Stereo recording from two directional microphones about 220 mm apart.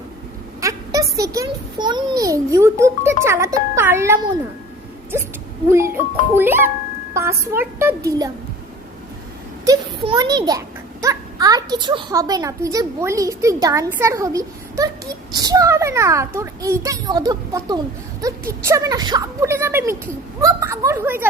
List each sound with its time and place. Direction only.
0.6 s a child's voice: 15° right (ahead or behind)
5.7 s a child's voice: 10° right (ahead or behind)
9.6 s a child's voice: 15° right (ahead or behind)